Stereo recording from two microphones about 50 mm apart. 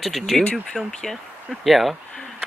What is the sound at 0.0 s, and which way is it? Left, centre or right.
Speech, centre.